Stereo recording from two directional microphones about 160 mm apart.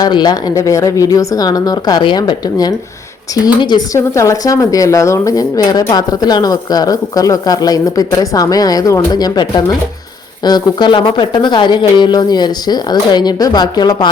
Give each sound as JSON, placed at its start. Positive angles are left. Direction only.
{"t": 0.0, "sound": "speech", "side_deg": 25}